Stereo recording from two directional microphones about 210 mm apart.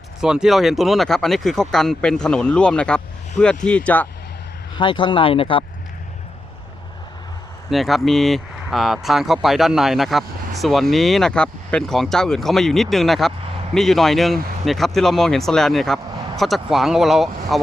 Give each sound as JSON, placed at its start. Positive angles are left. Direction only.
{"t": 0.2, "sound": "speech", "side_deg": -5}
{"t": 4.8, "sound": "speech", "side_deg": 20}
{"t": 7.7, "sound": "speech", "side_deg": 0}